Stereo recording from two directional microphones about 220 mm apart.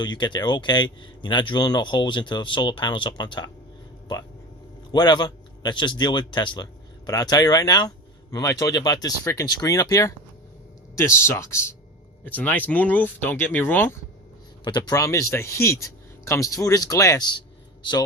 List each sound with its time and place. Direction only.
0.0 s speech: 20° left (ahead or behind)
4.9 s speech: 20° left (ahead or behind)